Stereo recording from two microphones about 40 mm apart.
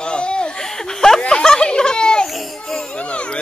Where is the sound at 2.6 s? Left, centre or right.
Centre.